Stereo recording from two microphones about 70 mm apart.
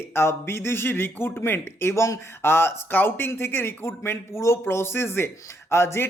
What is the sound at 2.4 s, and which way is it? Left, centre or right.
A man's voice, left.